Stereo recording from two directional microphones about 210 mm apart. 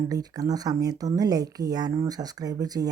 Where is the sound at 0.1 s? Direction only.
15° right (ahead or behind).